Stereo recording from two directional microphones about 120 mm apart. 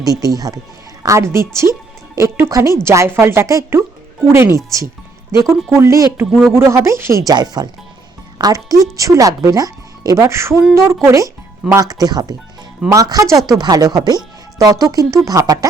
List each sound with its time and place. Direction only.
0.0 s speech: 30° right (ahead or behind)